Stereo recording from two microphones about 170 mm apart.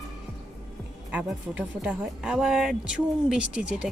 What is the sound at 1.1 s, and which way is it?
Speech, 10° right (ahead or behind).